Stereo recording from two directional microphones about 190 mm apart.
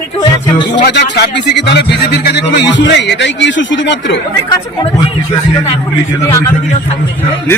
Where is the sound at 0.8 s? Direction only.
60° left (ahead or behind).